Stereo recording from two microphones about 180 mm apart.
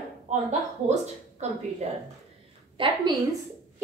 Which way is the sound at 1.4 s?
40° right (ahead or behind).